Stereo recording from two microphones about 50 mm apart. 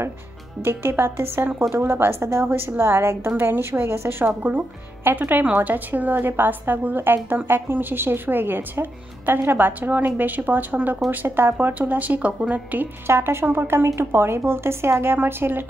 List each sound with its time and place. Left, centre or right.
0.6 s a woman's voice: right
4.4 s a woman's voice: right
11.6 s a woman's voice: right
13.0 s a woman's voice: right